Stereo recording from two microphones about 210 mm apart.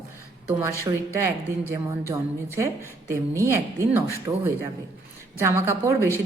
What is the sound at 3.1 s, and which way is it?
A man's voice, 15° right (ahead or behind).